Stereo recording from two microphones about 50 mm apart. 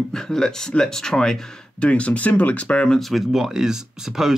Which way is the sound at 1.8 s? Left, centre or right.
Left.